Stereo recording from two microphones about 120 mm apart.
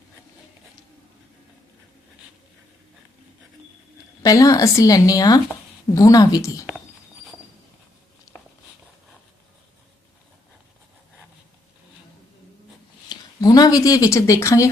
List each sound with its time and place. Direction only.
4.2 s speech: 30° left (ahead or behind)
13.1 s speech: 35° left (ahead or behind)